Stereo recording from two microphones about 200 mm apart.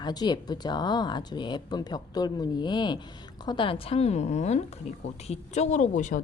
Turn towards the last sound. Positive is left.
turn(degrees=40)  # may be behind; listen again after turning